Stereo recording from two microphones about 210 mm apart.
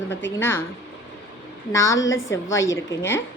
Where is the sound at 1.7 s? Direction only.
15° left (ahead or behind).